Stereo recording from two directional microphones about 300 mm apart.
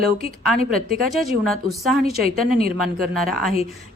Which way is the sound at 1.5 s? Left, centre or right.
Centre.